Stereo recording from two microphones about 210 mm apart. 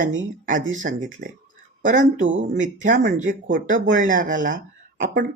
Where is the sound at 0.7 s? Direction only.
35° right (ahead or behind).